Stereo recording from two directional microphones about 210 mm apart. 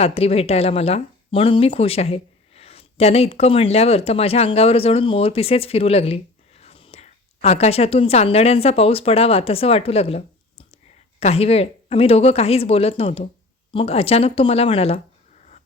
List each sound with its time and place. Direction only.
0.0 s speech: 30° left (ahead or behind)